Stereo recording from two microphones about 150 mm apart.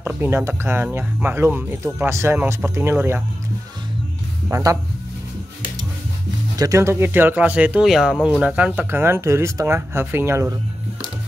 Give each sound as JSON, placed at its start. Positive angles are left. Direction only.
{"t": 0.0, "sound": "speech", "side_deg": -15}
{"t": 4.5, "sound": "speech", "side_deg": -20}
{"t": 6.5, "sound": "speech", "side_deg": -25}